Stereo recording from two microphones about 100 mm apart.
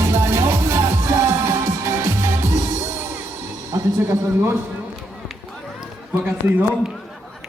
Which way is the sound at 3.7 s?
30° right (ahead or behind).